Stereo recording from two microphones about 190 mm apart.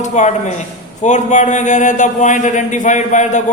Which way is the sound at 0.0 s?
40° left (ahead or behind).